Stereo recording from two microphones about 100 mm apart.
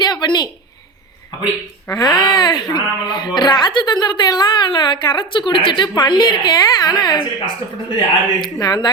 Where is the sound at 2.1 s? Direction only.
50° left (ahead or behind).